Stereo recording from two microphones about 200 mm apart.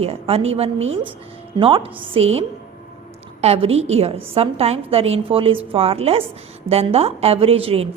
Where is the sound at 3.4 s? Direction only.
30° right (ahead or behind).